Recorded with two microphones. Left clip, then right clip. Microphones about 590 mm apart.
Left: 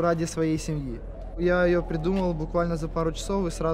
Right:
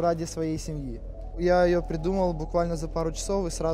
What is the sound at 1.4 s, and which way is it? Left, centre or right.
Speech, right.